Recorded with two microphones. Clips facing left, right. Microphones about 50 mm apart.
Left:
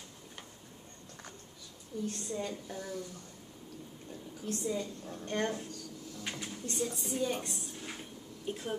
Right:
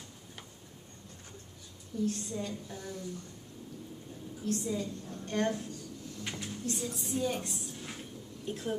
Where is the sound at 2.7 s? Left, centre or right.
Left.